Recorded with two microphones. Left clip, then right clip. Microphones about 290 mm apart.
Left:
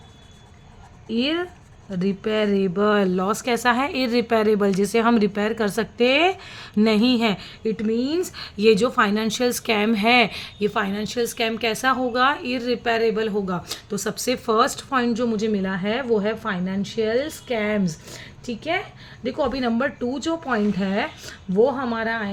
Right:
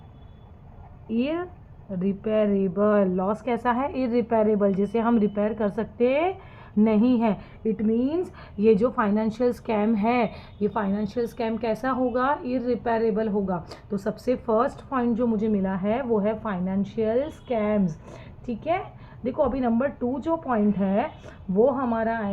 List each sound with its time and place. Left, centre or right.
1.1 s a woman's voice: left